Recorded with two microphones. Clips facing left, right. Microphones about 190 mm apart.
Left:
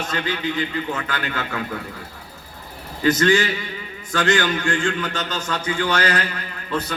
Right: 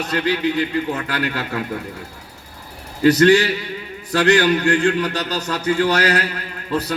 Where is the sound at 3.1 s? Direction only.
35° right (ahead or behind).